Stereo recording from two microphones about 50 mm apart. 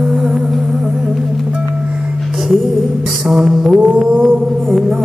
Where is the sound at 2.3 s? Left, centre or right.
Centre.